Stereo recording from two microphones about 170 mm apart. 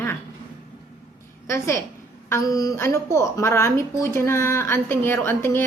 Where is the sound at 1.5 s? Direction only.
15° left (ahead or behind).